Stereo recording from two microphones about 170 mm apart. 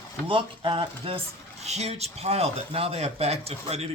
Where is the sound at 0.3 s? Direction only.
30° right (ahead or behind).